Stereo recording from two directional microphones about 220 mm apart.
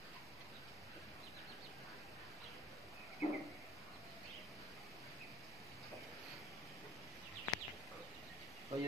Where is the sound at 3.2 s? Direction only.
30° left (ahead or behind).